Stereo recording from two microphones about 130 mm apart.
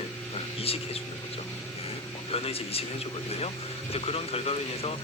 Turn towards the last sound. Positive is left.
turn(degrees=50)  # may be behind; listen again after turning